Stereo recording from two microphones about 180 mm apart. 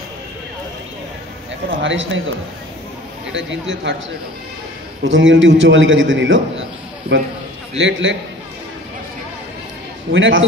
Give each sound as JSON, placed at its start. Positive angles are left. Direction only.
{"t": 1.8, "sound": "a man's voice", "side_deg": -90}
{"t": 3.3, "sound": "a man's voice", "side_deg": -90}
{"t": 5.0, "sound": "a man's voice", "side_deg": -90}
{"t": 10.1, "sound": "a man's voice", "side_deg": -90}